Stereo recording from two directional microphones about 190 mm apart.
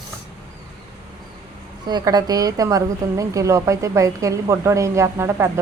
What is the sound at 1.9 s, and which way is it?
A woman's voice, 20° right (ahead or behind).